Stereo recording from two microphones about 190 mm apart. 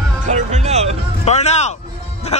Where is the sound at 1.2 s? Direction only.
35° left (ahead or behind).